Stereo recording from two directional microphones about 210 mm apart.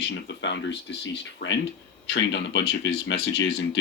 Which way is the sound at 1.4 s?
45° left (ahead or behind).